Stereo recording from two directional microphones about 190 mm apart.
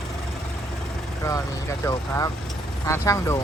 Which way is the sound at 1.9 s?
15° left (ahead or behind).